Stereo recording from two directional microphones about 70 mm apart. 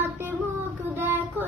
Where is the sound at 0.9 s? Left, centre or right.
Right.